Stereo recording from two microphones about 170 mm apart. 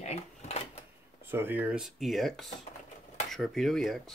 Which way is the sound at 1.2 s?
10° right (ahead or behind).